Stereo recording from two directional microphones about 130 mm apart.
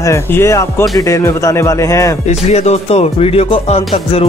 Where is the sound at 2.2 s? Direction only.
55° left (ahead or behind).